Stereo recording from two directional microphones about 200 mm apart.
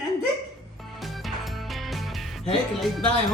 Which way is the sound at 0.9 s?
Centre (ahead or behind).